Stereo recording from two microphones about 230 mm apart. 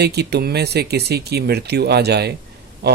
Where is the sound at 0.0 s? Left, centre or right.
Right.